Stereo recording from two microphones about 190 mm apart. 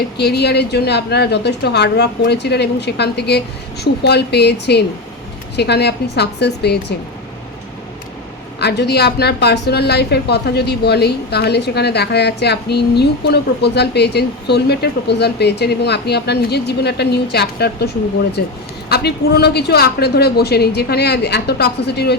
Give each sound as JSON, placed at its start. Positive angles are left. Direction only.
{"t": 0.2, "sound": "a woman's voice", "side_deg": 60}
{"t": 8.6, "sound": "a woman's voice", "side_deg": 60}